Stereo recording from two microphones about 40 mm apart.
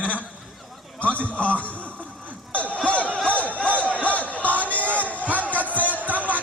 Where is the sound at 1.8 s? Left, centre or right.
Right.